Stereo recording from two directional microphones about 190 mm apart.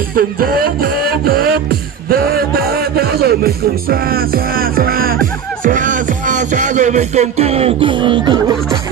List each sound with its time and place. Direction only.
0.1 s music: 50° right (ahead or behind); by 8.5 s 25° right (ahead or behind)